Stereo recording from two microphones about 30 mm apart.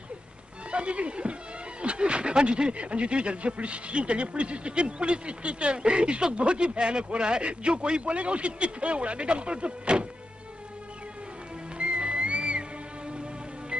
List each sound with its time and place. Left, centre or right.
0.7 s speech: right
11.8 s music: right